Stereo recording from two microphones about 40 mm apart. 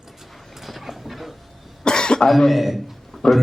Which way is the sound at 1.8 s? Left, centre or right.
Centre.